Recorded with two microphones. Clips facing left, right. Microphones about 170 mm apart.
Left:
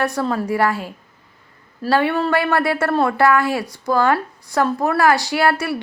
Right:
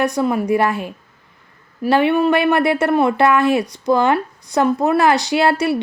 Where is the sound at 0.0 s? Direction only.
15° right (ahead or behind).